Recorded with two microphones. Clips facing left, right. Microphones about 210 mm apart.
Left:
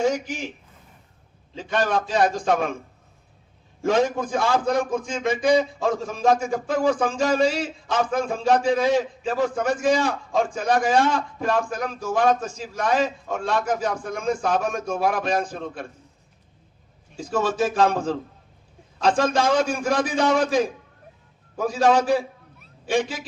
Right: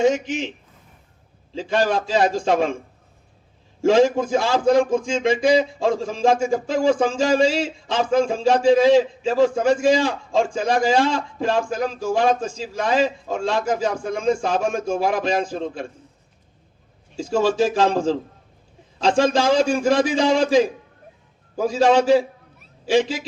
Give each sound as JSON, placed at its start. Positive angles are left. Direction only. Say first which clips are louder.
{"t": 0.0, "sound": "a man's voice", "louder": "right 4 dB", "side_deg": -20}
{"t": 1.5, "sound": "a man's voice", "louder": "right 3 dB", "side_deg": -30}
{"t": 3.8, "sound": "a man's voice", "louder": "right 5 dB", "side_deg": -30}
{"t": 17.2, "sound": "a man's voice", "louder": "right 4 dB", "side_deg": -25}